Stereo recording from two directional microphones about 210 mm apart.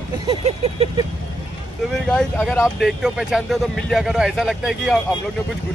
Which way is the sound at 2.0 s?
5° left (ahead or behind).